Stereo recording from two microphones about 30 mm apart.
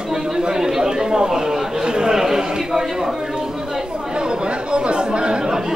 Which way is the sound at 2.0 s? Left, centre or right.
Centre.